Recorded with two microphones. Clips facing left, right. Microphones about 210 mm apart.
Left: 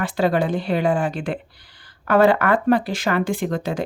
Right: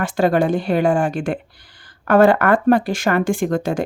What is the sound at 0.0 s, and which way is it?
Speech, 45° right (ahead or behind).